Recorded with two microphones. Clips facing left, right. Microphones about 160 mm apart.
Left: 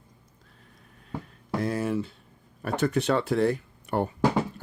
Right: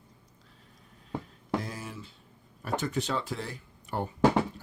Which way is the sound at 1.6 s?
60° left (ahead or behind).